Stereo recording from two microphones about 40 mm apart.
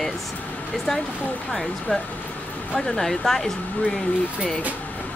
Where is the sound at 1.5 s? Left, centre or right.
Centre.